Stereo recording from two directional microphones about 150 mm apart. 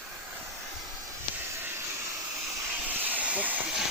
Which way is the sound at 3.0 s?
10° right (ahead or behind).